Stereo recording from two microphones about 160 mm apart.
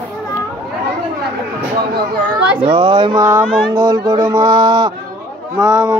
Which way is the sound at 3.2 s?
15° right (ahead or behind).